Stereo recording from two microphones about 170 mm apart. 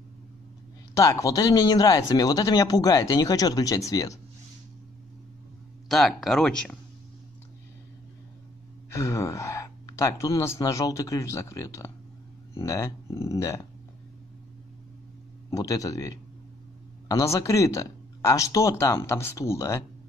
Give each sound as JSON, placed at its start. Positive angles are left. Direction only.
{"t": 0.9, "sound": "speech", "side_deg": 20}
{"t": 5.9, "sound": "speech", "side_deg": 0}
{"t": 8.9, "sound": "speech", "side_deg": 20}
{"t": 15.5, "sound": "speech", "side_deg": 20}